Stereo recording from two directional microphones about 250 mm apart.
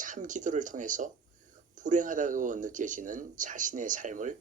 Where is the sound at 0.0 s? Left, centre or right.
Right.